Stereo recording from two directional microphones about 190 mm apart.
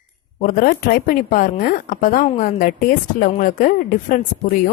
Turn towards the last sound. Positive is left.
turn(degrees=45)  # may be behind; listen again after turning